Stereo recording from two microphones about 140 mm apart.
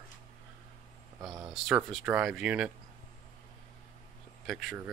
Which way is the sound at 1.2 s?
25° right (ahead or behind).